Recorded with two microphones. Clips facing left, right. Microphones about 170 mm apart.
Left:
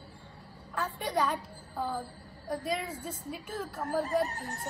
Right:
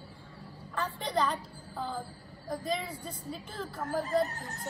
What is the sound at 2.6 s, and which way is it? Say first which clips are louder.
Speech: right 1 dB; 75° left (ahead or behind).